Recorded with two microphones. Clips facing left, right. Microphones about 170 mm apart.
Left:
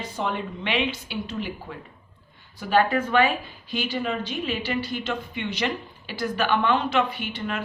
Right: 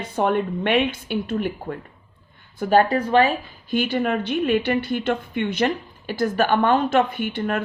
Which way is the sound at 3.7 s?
55° right (ahead or behind).